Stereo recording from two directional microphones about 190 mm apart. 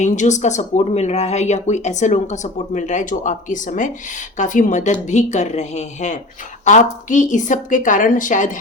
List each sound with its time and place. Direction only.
0.0 s speech: 40° left (ahead or behind)